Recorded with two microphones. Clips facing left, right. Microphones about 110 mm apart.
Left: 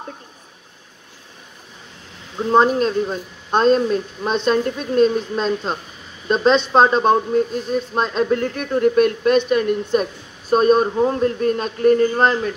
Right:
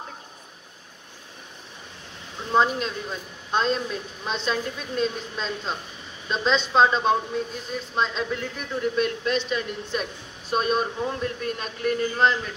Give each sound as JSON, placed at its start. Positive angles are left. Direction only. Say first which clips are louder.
{"t": 2.5, "sound": "speech", "louder": "left 7 dB", "side_deg": 45}
{"t": 10.5, "sound": "a man's voice", "louder": "left 9 dB", "side_deg": 40}